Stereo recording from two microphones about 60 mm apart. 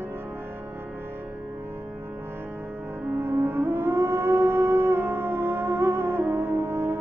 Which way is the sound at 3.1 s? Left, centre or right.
Right.